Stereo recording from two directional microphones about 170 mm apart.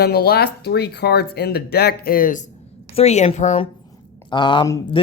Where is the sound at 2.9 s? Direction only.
40° left (ahead or behind).